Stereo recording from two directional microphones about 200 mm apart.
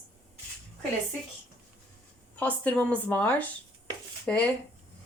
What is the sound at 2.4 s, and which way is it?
Speech, 5° left (ahead or behind).